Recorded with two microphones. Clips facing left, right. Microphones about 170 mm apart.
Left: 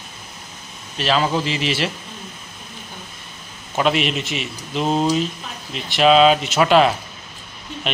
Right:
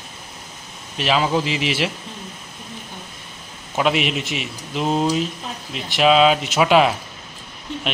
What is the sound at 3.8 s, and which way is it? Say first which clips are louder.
Speech: left 1 dB; 10° right (ahead or behind).